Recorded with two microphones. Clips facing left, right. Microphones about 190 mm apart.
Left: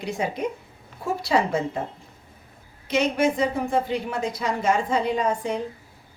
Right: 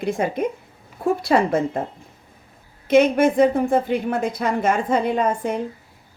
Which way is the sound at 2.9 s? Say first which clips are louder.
Right 7 dB; 55° right (ahead or behind).